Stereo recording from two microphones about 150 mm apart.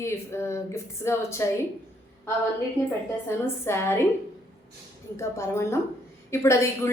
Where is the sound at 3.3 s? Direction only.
15° left (ahead or behind).